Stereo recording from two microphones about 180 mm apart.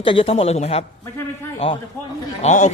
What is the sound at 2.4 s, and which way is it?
Speech, 40° left (ahead or behind).